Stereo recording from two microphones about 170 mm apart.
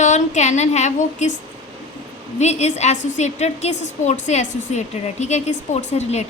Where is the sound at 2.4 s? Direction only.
40° left (ahead or behind).